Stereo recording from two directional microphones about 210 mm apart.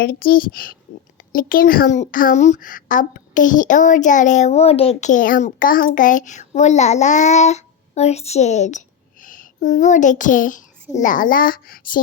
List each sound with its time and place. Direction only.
0.0 s a child's voice: 45° left (ahead or behind)